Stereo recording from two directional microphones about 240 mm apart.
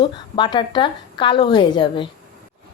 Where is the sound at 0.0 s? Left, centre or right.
Centre.